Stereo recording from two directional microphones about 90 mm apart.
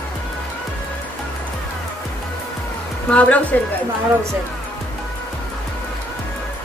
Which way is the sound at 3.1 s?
15° left (ahead or behind).